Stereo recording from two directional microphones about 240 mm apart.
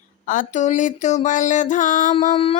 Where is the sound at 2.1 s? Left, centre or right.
Left.